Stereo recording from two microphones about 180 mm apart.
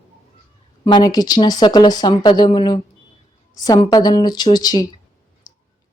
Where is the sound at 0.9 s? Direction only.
25° left (ahead or behind).